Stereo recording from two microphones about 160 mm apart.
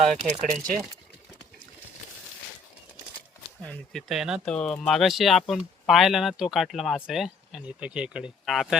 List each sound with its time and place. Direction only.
0.2 s speech: 50° right (ahead or behind)
3.7 s speech: centre (ahead or behind)